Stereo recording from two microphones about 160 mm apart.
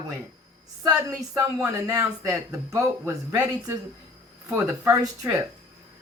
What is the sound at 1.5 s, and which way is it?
Speech, 20° right (ahead or behind).